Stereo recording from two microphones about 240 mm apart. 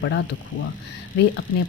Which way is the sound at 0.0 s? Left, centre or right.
Left.